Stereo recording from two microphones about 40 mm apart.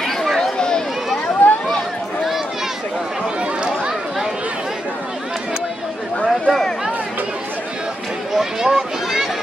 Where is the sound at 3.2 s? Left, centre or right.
Right.